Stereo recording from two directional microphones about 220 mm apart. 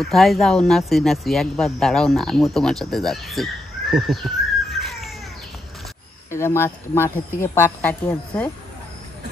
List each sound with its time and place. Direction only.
0.0 s speech: centre (ahead or behind)
4.6 s a sound: centre (ahead or behind)
6.3 s speech: 10° left (ahead or behind)